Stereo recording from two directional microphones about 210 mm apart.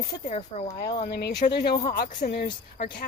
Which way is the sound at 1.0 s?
50° left (ahead or behind).